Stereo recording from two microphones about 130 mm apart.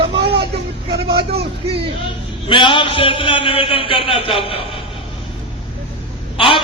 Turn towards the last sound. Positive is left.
turn(degrees=40)  # may be behind; listen again after turning